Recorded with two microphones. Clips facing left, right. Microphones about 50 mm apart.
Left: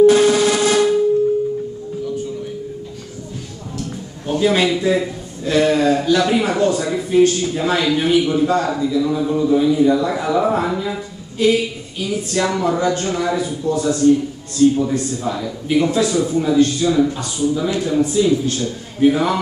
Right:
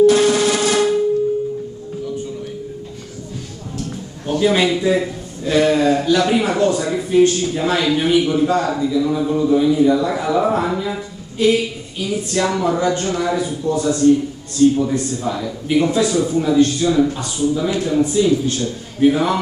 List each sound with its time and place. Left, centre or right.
0.0 s rub: centre
4.3 s a man's voice: centre
13.8 s a man's voice: centre